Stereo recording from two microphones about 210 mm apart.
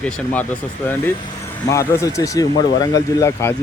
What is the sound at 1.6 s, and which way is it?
Speech, 15° left (ahead or behind).